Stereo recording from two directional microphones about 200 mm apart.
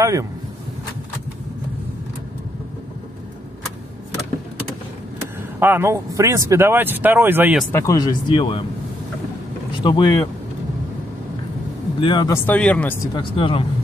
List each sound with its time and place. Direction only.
0.0 s speech: 15° right (ahead or behind)
5.6 s speech: 10° right (ahead or behind)
7.7 s speech: 15° left (ahead or behind)
9.8 s speech: 25° left (ahead or behind)
12.0 s speech: 25° left (ahead or behind)